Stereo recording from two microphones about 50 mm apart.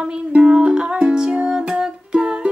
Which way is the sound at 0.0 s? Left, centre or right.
Centre.